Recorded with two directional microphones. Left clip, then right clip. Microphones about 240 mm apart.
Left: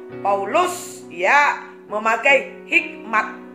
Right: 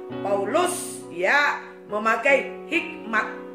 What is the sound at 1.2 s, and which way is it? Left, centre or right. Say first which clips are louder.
A man's voice: left 5 dB; centre.